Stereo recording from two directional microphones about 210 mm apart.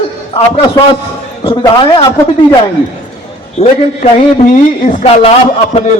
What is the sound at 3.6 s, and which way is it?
Speech, 30° left (ahead or behind).